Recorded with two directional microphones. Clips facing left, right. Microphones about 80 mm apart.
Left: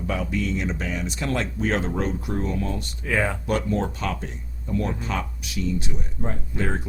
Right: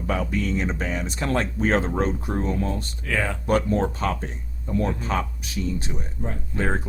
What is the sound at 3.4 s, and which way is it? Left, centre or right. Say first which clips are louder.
Speech: right 3 dB; right.